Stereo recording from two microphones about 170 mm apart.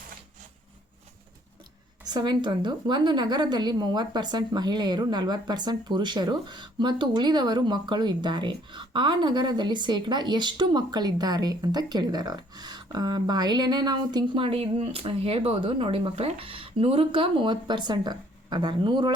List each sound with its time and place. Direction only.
2.0 s a woman's voice: 25° right (ahead or behind)